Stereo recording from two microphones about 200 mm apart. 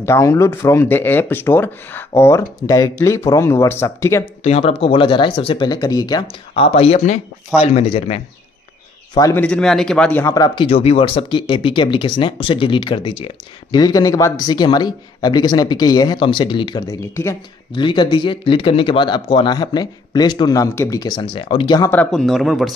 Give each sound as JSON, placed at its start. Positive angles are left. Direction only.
{"t": 0.0, "sound": "speech", "side_deg": 15}
{"t": 4.4, "sound": "speech", "side_deg": 30}
{"t": 6.5, "sound": "speech", "side_deg": 30}
{"t": 9.1, "sound": "speech", "side_deg": 20}
{"t": 9.4, "sound": "speech", "side_deg": 5}
{"t": 10.2, "sound": "speech", "side_deg": 20}
{"t": 17.7, "sound": "speech", "side_deg": 25}
{"t": 21.9, "sound": "speech", "side_deg": 5}